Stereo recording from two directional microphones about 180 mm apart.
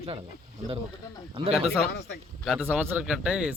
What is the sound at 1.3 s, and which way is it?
Speech, 30° right (ahead or behind).